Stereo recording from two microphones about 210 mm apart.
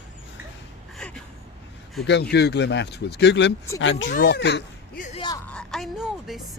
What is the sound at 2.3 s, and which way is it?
Speech, 50° left (ahead or behind).